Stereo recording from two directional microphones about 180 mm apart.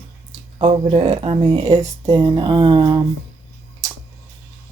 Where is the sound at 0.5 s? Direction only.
30° right (ahead or behind).